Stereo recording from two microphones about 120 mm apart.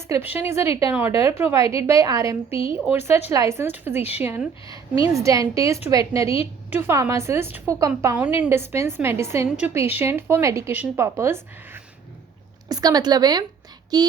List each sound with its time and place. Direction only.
0.1 s speech: 15° right (ahead or behind)
12.6 s speech: 35° right (ahead or behind)